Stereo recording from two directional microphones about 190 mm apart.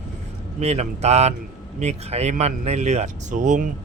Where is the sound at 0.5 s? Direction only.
35° right (ahead or behind).